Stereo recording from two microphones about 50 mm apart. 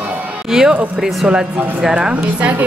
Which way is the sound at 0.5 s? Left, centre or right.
Centre.